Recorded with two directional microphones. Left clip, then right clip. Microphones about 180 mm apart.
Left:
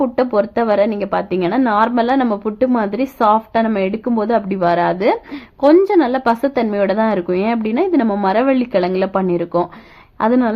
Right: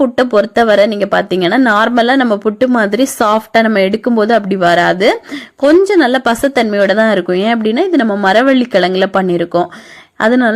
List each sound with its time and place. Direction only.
0.0 s a woman's voice: 25° right (ahead or behind)